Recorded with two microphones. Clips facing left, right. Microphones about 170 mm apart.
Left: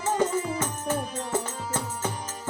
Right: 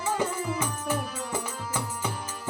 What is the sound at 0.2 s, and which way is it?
Music, 10° right (ahead or behind).